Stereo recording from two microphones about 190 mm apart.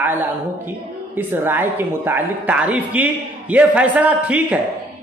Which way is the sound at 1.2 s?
10° right (ahead or behind).